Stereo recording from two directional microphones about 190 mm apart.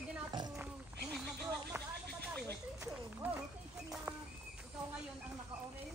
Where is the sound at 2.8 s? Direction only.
10° right (ahead or behind).